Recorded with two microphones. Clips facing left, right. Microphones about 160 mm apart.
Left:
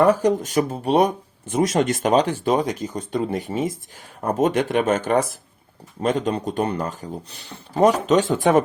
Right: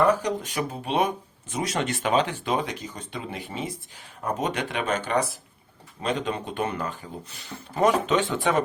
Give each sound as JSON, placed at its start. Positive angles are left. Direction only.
{"t": 0.2, "sound": "speech", "side_deg": 45}